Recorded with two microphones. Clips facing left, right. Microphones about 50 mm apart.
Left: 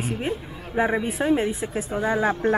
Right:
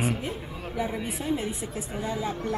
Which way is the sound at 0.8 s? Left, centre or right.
Left.